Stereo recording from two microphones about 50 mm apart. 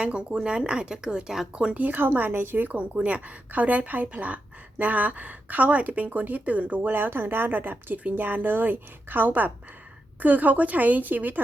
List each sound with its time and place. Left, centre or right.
0.0 s speech: right
1.7 s a woman's voice: right
2.7 s a woman's voice: right